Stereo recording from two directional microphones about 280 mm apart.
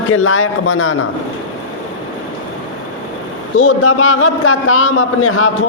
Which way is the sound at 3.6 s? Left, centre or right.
Left.